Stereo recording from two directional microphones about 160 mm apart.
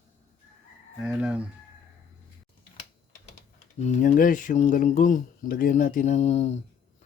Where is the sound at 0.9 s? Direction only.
5° right (ahead or behind).